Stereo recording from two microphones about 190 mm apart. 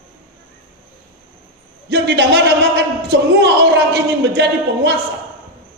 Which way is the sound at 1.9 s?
65° right (ahead or behind).